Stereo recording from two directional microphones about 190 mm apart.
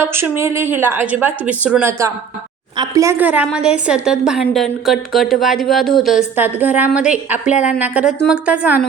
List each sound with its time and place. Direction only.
0.0 s a woman's voice: 10° right (ahead or behind)
6.3 s a woman's voice: 10° right (ahead or behind)
7.5 s a woman's voice: 40° left (ahead or behind)
7.8 s a woman's voice: 5° right (ahead or behind)